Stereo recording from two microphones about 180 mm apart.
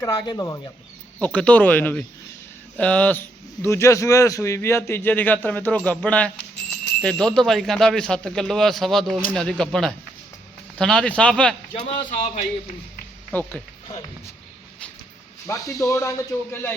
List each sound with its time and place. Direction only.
0.0 s speech: 20° left (ahead or behind)
1.2 s a man's voice: 5° left (ahead or behind)
11.9 s speech: 40° left (ahead or behind)
13.3 s a man's voice: 10° left (ahead or behind)
15.4 s a man's voice: 20° left (ahead or behind)